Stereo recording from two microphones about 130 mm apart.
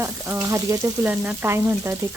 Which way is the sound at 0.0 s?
20° right (ahead or behind).